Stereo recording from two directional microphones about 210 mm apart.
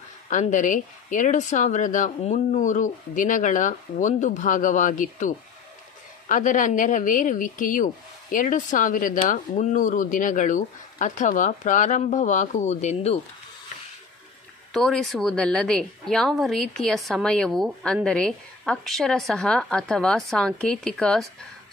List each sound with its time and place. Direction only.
0.3 s speech: 35° left (ahead or behind)
14.7 s a woman's voice: centre (ahead or behind)